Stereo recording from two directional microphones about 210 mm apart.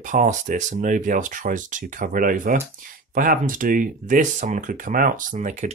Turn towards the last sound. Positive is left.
turn(degrees=-35)  # may be behind; listen again after turning